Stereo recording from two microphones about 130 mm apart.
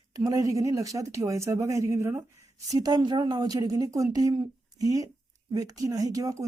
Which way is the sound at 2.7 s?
30° right (ahead or behind).